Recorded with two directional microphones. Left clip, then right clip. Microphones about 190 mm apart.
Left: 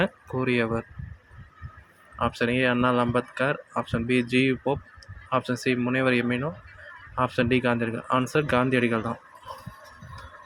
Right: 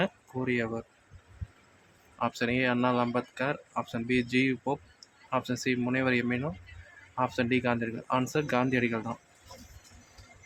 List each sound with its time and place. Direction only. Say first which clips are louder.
0.0 s speech: left 5 dB; 20° left (ahead or behind)
2.1 s speech: left 4 dB; 10° left (ahead or behind)